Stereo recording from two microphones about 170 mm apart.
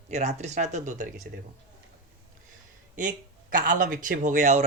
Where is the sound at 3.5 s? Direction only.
55° right (ahead or behind).